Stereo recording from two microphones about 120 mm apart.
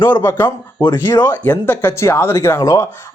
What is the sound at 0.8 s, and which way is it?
Speech, 30° left (ahead or behind).